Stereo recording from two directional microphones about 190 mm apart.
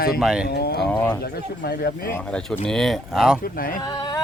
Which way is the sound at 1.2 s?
55° left (ahead or behind).